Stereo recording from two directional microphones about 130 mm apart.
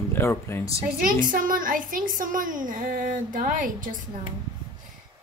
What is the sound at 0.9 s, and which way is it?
A woman's voice, 90° right.